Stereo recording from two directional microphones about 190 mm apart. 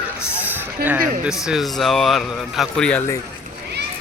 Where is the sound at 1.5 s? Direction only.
Centre (ahead or behind).